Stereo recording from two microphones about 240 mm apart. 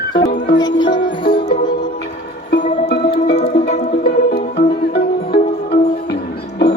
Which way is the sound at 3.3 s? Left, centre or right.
Left.